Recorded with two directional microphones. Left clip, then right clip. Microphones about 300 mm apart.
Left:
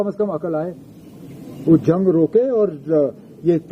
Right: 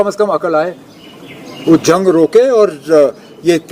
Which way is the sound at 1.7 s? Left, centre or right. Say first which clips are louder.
Right 7 dB; centre.